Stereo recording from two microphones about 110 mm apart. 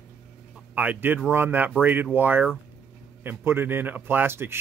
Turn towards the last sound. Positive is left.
turn(degrees=-20)  # may be behind; listen again after turning